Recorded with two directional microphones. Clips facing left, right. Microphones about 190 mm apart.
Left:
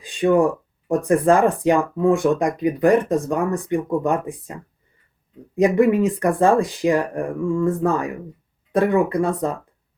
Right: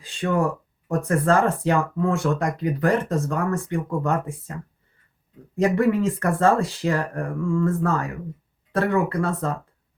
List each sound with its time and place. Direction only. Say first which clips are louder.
0.0 s speech: left 6 dB; 15° left (ahead or behind)
5.5 s speech: left 4 dB; 15° left (ahead or behind)